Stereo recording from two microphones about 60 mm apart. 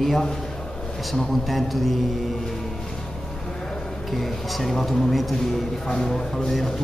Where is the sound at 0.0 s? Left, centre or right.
Centre.